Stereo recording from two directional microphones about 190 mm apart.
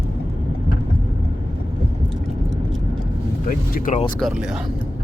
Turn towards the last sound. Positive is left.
turn(degrees=45)  # may be behind; listen again after turning